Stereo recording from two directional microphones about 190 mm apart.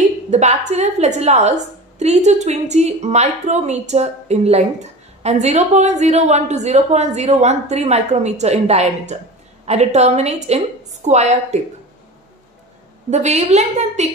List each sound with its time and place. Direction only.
0.3 s a woman's voice: 35° right (ahead or behind)
13.1 s a woman's voice: 35° right (ahead or behind)